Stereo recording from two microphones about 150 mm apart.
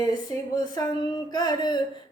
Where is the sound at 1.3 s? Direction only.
30° left (ahead or behind).